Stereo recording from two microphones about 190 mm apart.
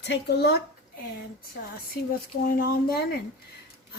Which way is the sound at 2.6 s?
55° left (ahead or behind).